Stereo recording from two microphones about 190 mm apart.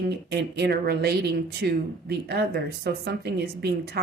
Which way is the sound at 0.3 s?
60° right (ahead or behind).